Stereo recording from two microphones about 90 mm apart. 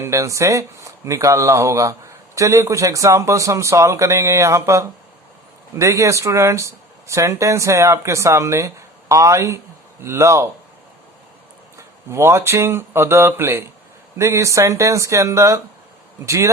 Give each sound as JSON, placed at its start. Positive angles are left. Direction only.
{"t": 0.0, "sound": "speech", "side_deg": -35}
{"t": 11.8, "sound": "speech", "side_deg": -30}